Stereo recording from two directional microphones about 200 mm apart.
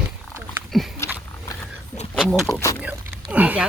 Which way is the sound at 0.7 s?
Centre (ahead or behind).